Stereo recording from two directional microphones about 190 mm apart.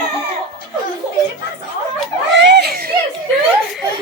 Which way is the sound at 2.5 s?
60° right (ahead or behind).